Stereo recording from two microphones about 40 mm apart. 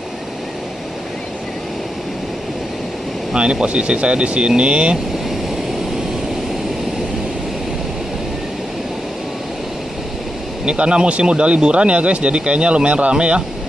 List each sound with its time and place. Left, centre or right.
3.3 s speech: right
10.6 s speech: right